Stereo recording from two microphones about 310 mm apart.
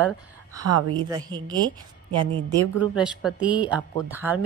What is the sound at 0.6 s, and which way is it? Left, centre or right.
Speech, right.